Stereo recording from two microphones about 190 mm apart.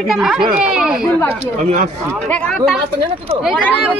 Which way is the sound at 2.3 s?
5° left (ahead or behind).